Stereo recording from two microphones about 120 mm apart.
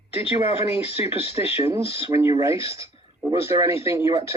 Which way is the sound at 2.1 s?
25° right (ahead or behind).